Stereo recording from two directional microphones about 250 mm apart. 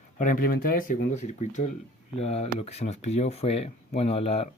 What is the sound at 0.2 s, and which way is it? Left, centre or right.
Speech, left.